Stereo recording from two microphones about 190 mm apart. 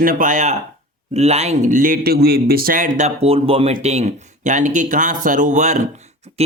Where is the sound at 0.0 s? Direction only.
45° right (ahead or behind).